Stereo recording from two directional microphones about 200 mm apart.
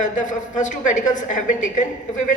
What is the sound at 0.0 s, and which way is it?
A woman's voice, 40° left (ahead or behind).